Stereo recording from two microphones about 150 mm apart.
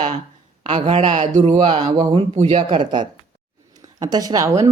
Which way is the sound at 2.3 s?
50° right (ahead or behind).